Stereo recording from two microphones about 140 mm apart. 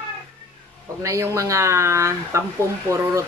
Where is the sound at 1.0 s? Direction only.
20° right (ahead or behind).